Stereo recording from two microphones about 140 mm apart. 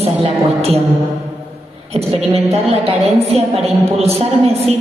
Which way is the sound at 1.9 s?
45° right (ahead or behind).